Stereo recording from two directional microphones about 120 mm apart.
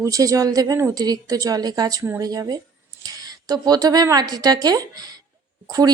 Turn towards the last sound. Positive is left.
turn(degrees=-35)  # may be behind; listen again after turning